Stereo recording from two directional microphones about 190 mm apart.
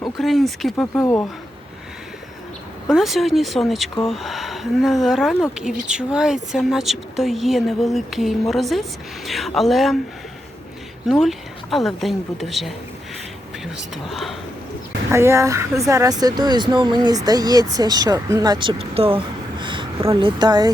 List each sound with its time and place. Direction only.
0.2 s a woman's voice: centre (ahead or behind)
0.9 s speech: 15° left (ahead or behind)
2.9 s a woman's voice: centre (ahead or behind)
11.1 s a woman's voice: centre (ahead or behind)
13.9 s a woman's voice: centre (ahead or behind)
15.1 s speech: 15° right (ahead or behind)